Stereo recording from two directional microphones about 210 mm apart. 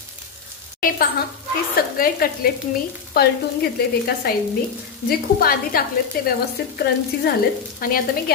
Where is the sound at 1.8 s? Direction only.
45° left (ahead or behind).